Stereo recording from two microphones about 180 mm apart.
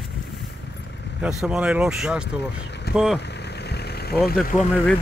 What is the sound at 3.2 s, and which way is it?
Vehicle, 65° left (ahead or behind).